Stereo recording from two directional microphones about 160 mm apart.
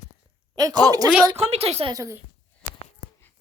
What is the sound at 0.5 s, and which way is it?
Speech, 25° right (ahead or behind).